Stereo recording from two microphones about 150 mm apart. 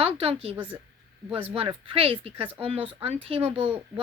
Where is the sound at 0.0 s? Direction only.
40° right (ahead or behind).